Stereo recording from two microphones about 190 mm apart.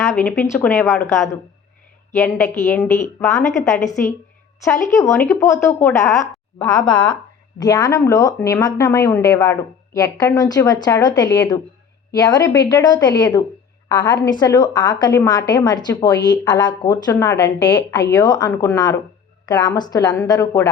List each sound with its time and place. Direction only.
0.0 s a woman's voice: 10° left (ahead or behind)
7.6 s a woman's voice: 20° left (ahead or behind)